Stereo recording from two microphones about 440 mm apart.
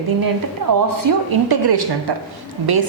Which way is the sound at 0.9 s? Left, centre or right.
Right.